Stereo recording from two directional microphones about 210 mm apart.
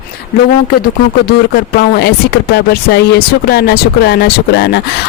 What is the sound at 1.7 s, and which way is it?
Speech, 50° left (ahead or behind).